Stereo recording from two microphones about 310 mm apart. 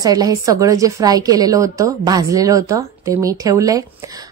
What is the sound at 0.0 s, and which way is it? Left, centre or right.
A woman's voice, centre.